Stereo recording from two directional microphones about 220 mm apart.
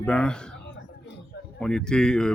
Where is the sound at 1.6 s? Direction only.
5° left (ahead or behind).